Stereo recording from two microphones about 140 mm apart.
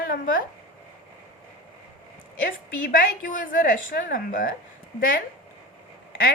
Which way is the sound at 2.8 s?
75° left (ahead or behind).